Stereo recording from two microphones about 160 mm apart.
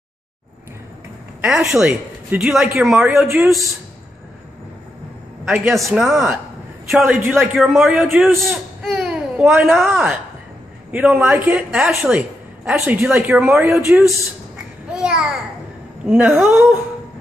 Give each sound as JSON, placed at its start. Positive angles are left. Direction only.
{"t": 1.4, "sound": "a man's voice", "side_deg": -5}
{"t": 5.4, "sound": "a woman's voice", "side_deg": -5}